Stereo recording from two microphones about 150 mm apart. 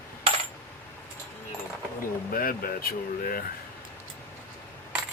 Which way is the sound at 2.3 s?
70° left (ahead or behind).